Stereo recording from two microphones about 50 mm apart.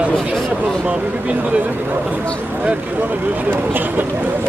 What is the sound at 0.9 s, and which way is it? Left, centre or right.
Speech, right.